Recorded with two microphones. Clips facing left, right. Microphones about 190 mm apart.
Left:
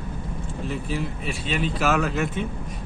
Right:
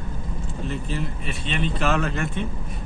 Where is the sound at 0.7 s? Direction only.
5° left (ahead or behind).